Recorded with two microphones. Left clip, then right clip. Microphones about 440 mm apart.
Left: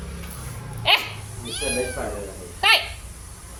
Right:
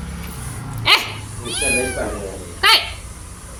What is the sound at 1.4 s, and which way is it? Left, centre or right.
Cat, left.